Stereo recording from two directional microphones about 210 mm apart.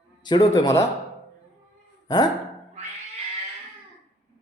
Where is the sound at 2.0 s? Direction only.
20° left (ahead or behind).